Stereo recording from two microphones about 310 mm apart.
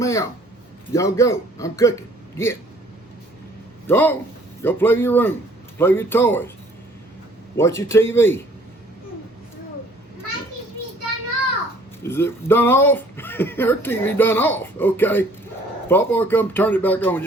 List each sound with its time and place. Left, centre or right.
0.0 s a man's voice: centre
3.8 s speech: centre
7.5 s speech: centre
12.0 s speech: centre